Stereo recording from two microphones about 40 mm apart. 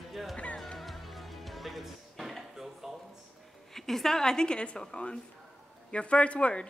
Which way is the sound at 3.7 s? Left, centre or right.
Centre.